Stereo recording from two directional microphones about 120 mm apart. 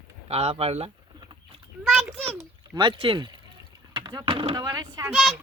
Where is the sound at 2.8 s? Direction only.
45° right (ahead or behind).